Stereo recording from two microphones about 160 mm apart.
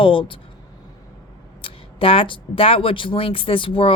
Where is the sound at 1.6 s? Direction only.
35° left (ahead or behind).